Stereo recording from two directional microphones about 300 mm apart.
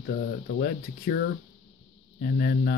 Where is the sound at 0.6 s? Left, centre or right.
Left.